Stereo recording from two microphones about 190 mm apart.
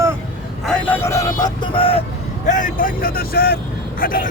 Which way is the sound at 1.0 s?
15° left (ahead or behind).